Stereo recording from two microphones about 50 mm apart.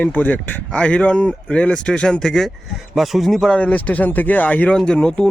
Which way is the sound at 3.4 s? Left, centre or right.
Left.